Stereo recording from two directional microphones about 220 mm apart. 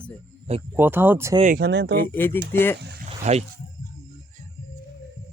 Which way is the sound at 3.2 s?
30° right (ahead or behind).